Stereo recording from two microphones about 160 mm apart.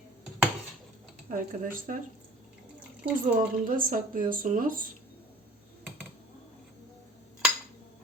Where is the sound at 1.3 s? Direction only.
60° right (ahead or behind).